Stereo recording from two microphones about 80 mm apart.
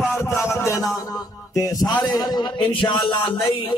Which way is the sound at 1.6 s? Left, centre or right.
Left.